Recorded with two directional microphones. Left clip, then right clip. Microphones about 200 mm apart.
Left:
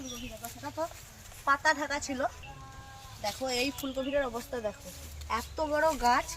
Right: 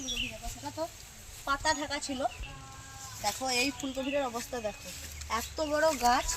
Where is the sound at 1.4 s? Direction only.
Centre (ahead or behind).